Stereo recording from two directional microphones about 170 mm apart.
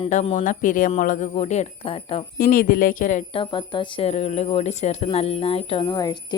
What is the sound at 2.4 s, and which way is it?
Speech, 55° left (ahead or behind).